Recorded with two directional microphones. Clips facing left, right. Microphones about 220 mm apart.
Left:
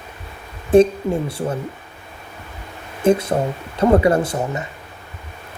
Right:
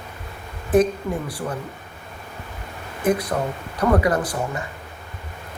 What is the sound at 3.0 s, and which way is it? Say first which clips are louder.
Speech: left 5 dB; 25° left (ahead or behind).